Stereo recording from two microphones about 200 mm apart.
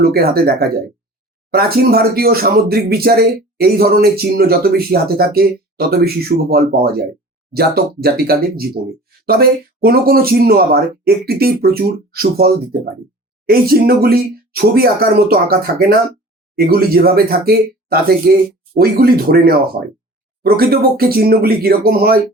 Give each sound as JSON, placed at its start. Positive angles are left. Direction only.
{"t": 0.0, "sound": "speech", "side_deg": -50}